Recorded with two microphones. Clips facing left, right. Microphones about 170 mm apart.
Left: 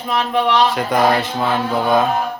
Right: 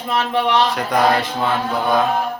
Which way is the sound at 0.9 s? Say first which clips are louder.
Left 1 dB; centre (ahead or behind).